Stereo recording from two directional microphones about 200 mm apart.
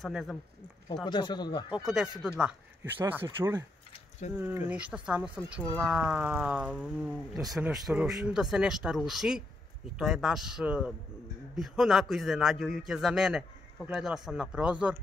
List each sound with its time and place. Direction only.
0.0 s a man's voice: centre (ahead or behind)
1.0 s speech: 20° left (ahead or behind)
1.9 s speech: 5° right (ahead or behind)
4.2 s speech: 35° left (ahead or behind)
4.6 s a man's voice: 5° right (ahead or behind)